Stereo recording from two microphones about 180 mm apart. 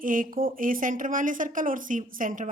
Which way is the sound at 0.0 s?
50° right (ahead or behind).